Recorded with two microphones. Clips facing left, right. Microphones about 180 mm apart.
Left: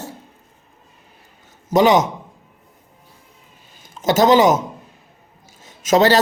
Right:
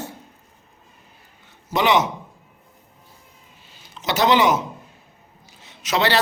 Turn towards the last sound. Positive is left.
turn(degrees=45)  # may be behind; listen again after turning